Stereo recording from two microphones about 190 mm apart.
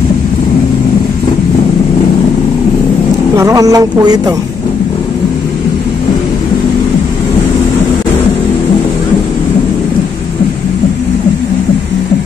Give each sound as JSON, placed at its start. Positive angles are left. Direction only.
{"t": 3.3, "sound": "speech", "side_deg": -15}